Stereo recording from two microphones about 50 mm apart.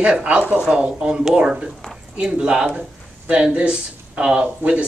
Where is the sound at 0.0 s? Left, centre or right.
Centre.